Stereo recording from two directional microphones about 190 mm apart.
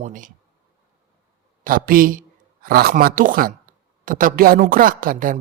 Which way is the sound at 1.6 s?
50° right (ahead or behind).